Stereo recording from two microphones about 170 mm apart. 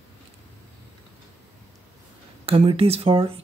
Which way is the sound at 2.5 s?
35° right (ahead or behind).